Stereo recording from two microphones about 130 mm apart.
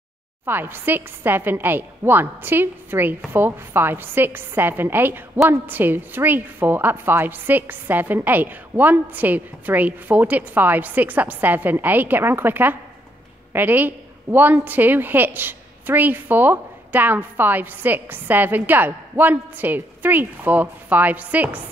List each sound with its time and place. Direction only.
0.5 s a woman's voice: 15° right (ahead or behind)